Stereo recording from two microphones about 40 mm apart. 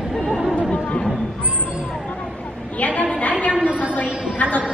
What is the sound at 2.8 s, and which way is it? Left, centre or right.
Speech, left.